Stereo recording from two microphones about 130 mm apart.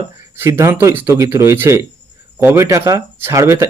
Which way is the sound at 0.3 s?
20° right (ahead or behind).